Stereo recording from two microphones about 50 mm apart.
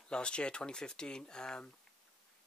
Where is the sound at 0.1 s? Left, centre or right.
Centre.